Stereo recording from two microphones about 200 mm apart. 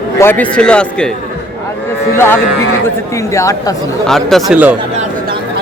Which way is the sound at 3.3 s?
15° left (ahead or behind).